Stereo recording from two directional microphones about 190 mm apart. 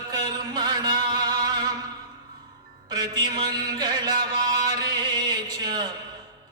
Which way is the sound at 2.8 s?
20° right (ahead or behind).